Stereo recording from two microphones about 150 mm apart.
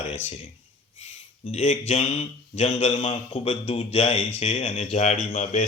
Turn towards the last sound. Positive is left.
turn(degrees=50)  # may be behind; listen again after turning